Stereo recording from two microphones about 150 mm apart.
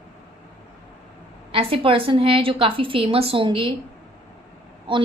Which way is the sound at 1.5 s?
35° right (ahead or behind).